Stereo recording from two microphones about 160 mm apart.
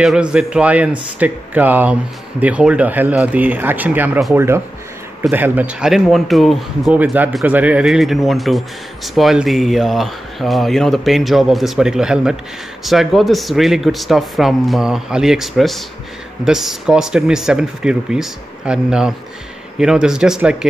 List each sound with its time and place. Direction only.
0.0 s speech: 5° right (ahead or behind)
5.3 s speech: 10° right (ahead or behind)